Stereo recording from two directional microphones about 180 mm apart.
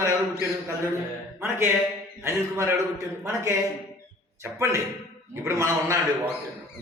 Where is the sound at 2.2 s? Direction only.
15° right (ahead or behind).